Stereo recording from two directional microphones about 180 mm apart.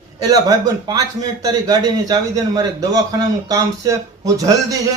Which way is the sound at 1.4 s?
20° right (ahead or behind).